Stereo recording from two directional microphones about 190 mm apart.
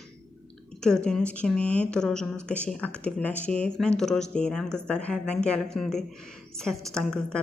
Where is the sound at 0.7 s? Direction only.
5° left (ahead or behind).